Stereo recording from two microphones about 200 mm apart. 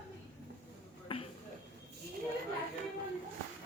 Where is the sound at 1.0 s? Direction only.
30° left (ahead or behind).